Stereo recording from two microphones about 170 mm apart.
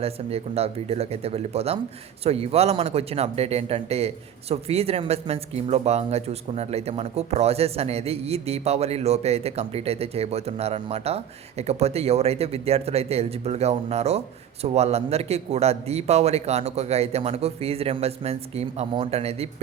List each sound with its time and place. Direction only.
0.0 s speech: 35° right (ahead or behind)